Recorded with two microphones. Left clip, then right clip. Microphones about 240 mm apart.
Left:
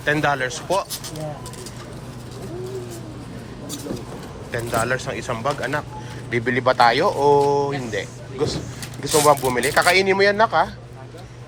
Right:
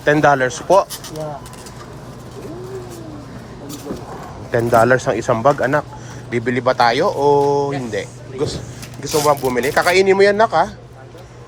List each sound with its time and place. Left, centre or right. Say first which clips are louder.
0.0 s speech: right 7 dB; right
4.5 s speech: right 10 dB; right
9.1 s speech: right 1 dB; centre